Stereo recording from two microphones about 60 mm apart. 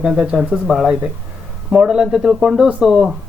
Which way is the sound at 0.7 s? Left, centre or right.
Centre.